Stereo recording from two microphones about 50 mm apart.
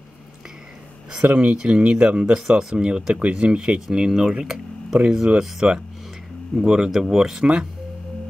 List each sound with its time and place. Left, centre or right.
1.2 s speech: right; by 7.4 s centre